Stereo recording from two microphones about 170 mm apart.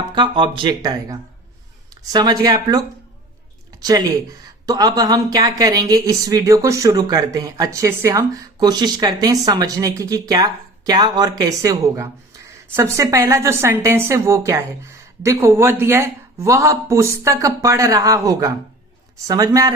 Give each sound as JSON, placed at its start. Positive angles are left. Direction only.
{"t": 0.1, "sound": "speech", "side_deg": -30}
{"t": 2.1, "sound": "speech", "side_deg": -25}